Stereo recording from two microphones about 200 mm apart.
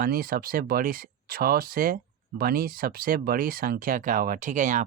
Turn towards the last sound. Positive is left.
turn(degrees=-40)  # may be behind; listen again after turning